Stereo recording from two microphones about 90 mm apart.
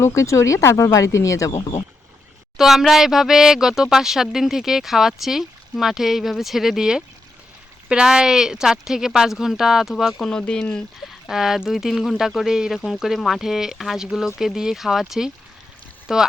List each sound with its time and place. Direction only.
0.0 s speech: 35° left (ahead or behind)
2.6 s speech: centre (ahead or behind)
10.2 s speech: 10° left (ahead or behind)
11.3 s speech: 5° right (ahead or behind)